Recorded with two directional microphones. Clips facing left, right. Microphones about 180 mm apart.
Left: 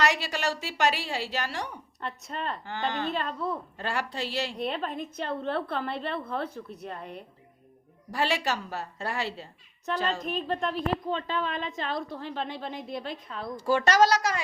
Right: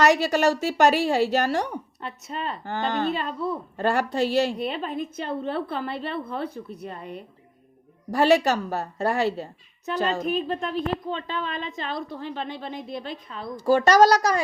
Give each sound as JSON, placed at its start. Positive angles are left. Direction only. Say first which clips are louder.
{"t": 0.0, "sound": "speech", "louder": "right 8 dB", "side_deg": -45}
{"t": 2.0, "sound": "a woman's voice", "louder": "left 3 dB", "side_deg": -5}
{"t": 2.6, "sound": "speech", "louder": "right 7 dB", "side_deg": -45}
{"t": 3.1, "sound": "a woman's voice", "louder": "right 3 dB", "side_deg": -5}
{"t": 3.8, "sound": "speech", "louder": "right 9 dB", "side_deg": -45}
{"t": 4.5, "sound": "a woman's voice", "louder": "right 3 dB", "side_deg": -5}
{"t": 8.1, "sound": "speech", "louder": "right 9 dB", "side_deg": -45}
{"t": 10.2, "sound": "a woman's voice", "louder": "right 4 dB", "side_deg": 0}
{"t": 13.6, "sound": "a woman's voice", "louder": "right 5 dB", "side_deg": -40}